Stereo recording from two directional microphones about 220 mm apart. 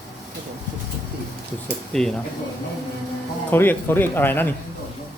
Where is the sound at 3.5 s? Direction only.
10° left (ahead or behind).